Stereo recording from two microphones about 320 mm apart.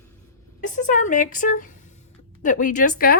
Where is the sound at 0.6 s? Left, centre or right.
Left.